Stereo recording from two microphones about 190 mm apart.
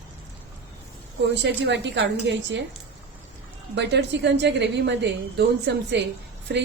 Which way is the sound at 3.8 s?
65° right (ahead or behind).